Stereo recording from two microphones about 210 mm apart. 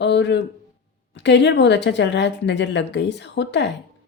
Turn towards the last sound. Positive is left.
turn(degrees=55)  # may be behind; listen again after turning